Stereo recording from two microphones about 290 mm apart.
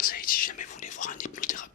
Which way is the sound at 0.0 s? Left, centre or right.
Left.